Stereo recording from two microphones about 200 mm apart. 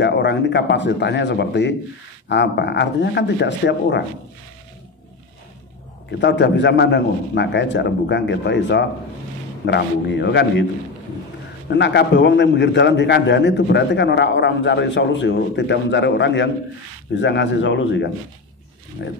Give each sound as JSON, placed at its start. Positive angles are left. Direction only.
{"t": 0.0, "sound": "a man's voice", "side_deg": 60}
{"t": 6.2, "sound": "a man's voice", "side_deg": 60}
{"t": 11.7, "sound": "a man's voice", "side_deg": 60}